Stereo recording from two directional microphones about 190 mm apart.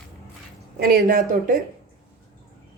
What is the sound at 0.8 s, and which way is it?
Speech, 50° right (ahead or behind).